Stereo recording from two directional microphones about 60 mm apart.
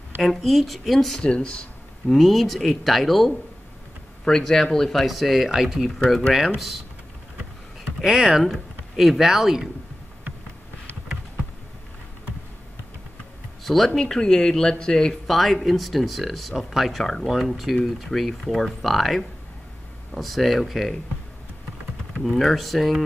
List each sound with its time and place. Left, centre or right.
0.2 s speech: centre
1.2 s speech: centre
2.0 s speech: centre
8.0 s speech: centre
13.7 s speech: centre
15.2 s speech: centre
22.2 s speech: centre